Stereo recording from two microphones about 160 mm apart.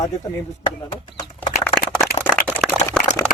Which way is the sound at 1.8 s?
65° left (ahead or behind).